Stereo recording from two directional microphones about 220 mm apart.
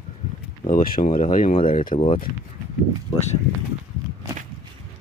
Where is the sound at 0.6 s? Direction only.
40° left (ahead or behind).